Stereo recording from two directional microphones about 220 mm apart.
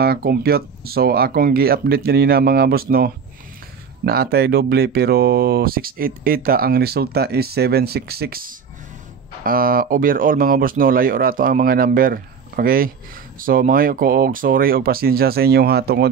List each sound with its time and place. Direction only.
0.0 s speech: 45° right (ahead or behind)